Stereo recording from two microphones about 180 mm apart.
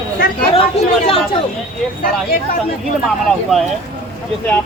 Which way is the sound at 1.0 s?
30° left (ahead or behind).